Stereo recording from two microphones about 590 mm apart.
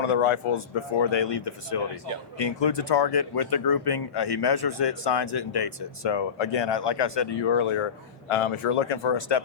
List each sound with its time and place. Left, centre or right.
0.0 s speech: left
1.1 s speech: left